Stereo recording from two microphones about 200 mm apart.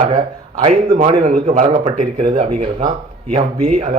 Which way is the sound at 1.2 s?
40° right (ahead or behind).